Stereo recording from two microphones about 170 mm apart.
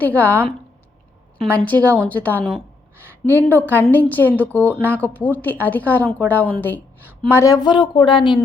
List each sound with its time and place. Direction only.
0.0 s a woman's voice: 10° left (ahead or behind)
1.5 s a woman's voice: 10° left (ahead or behind); by 8.4 s 30° left (ahead or behind)